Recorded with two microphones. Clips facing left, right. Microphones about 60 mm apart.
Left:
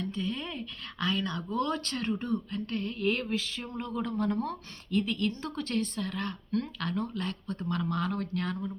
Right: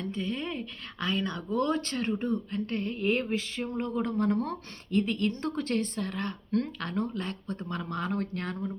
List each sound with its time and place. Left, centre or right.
0.0 s speech: right